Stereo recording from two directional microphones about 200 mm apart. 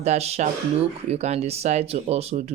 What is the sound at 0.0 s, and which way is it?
Speech, 30° right (ahead or behind).